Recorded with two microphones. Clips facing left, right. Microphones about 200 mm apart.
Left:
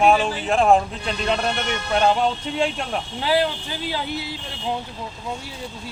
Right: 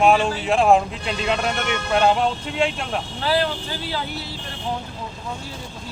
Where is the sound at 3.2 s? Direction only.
15° left (ahead or behind).